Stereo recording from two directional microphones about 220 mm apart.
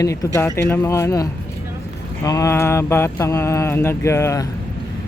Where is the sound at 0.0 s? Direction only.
15° left (ahead or behind).